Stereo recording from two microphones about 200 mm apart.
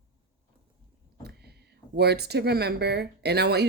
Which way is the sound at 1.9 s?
55° right (ahead or behind).